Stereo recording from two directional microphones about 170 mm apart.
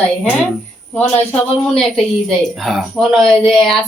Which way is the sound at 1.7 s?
Centre (ahead or behind).